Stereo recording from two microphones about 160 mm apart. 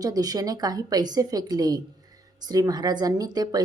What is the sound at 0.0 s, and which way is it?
A woman's voice, 25° right (ahead or behind).